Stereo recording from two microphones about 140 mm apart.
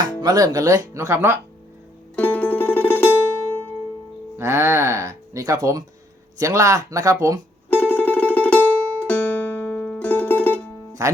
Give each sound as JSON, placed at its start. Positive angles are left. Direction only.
{"t": 0.2, "sound": "speech", "side_deg": -25}
{"t": 2.1, "sound": "music", "side_deg": 10}
{"t": 4.4, "sound": "speech", "side_deg": -15}
{"t": 7.7, "sound": "music", "side_deg": 10}
{"t": 11.0, "sound": "speech", "side_deg": -25}